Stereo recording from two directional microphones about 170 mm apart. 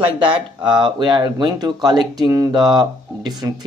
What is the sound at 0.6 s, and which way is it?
Speech, 25° right (ahead or behind).